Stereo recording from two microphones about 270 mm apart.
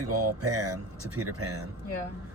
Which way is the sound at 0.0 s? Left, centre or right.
Right.